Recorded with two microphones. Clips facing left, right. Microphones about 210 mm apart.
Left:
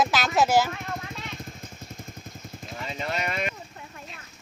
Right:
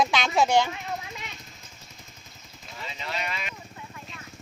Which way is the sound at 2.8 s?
50° left (ahead or behind).